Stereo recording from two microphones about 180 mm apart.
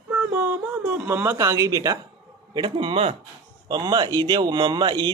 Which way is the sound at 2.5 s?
25° right (ahead or behind).